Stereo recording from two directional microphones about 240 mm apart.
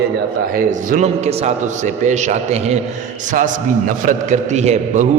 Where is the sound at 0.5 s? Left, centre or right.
Right.